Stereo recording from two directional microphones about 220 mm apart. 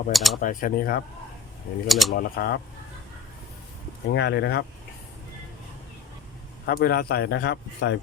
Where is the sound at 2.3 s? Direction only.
45° left (ahead or behind).